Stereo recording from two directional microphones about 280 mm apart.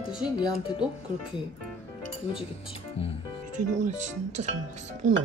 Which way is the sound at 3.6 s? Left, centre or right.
Right.